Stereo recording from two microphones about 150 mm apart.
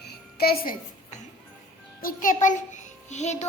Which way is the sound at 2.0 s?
65° left (ahead or behind).